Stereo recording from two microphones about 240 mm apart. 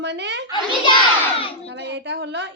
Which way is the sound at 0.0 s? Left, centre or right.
Right.